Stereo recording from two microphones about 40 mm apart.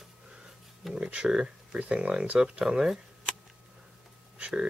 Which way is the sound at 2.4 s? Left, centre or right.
Right.